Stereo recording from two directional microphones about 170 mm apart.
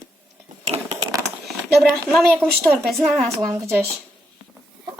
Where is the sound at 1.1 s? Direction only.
15° right (ahead or behind).